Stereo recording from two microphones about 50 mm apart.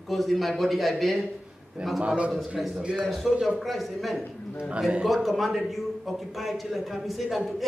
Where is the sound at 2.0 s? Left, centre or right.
Right.